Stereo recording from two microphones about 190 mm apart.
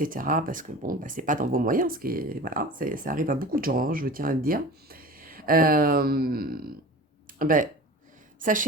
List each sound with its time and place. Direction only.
0.0 s a woman's voice: 45° right (ahead or behind)